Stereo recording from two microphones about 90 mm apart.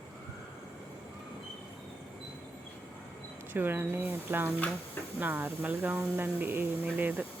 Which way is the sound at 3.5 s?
25° right (ahead or behind).